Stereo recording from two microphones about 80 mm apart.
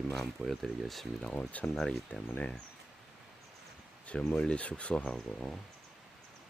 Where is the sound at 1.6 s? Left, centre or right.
Centre.